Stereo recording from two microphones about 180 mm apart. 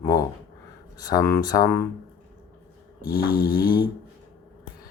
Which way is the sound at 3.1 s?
55° left (ahead or behind).